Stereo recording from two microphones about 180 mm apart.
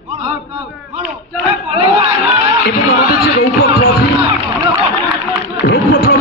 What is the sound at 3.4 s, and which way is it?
Music, 60° left (ahead or behind).